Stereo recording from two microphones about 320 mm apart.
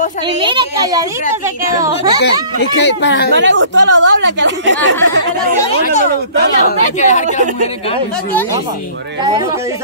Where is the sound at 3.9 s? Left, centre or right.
Right.